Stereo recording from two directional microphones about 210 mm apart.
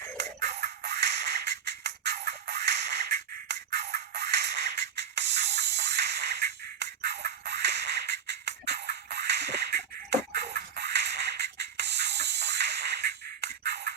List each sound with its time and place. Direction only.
0.3 s music: 55° right (ahead or behind)